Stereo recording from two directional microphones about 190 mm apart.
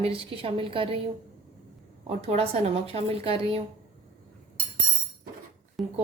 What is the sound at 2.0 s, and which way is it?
Speech, 35° right (ahead or behind).